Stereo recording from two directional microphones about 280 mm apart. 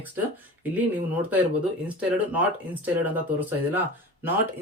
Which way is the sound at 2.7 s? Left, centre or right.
Centre.